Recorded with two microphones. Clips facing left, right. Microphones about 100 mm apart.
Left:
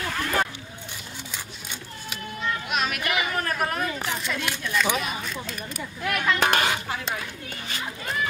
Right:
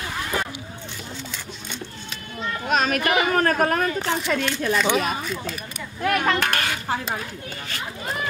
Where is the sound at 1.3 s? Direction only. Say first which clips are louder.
Right 3 dB; 10° left (ahead or behind).